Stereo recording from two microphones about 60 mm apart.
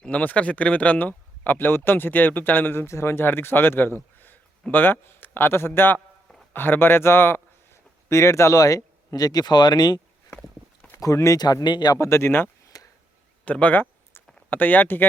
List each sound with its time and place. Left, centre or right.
0.1 s speech: left
2.8 s speech: left
8.1 s speech: left
11.0 s speech: left
12.0 s speech: left
13.4 s speech: left